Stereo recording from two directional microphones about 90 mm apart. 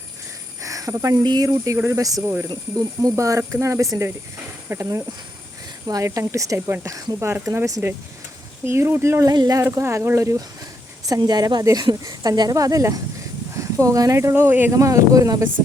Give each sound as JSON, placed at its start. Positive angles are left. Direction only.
{"t": 0.6, "sound": "a sound", "side_deg": -40}
{"t": 1.2, "sound": "speech", "side_deg": -50}
{"t": 1.5, "sound": "speech", "side_deg": -35}
{"t": 9.2, "sound": "speech", "side_deg": -45}
{"t": 9.6, "sound": "speech", "side_deg": -30}
{"t": 11.0, "sound": "a woman's voice", "side_deg": -45}
{"t": 14.7, "sound": "speech", "side_deg": -35}